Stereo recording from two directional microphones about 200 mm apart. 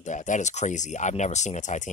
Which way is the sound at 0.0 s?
35° left (ahead or behind).